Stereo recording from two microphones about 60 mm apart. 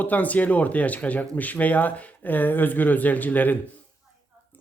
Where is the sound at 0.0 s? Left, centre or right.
Left.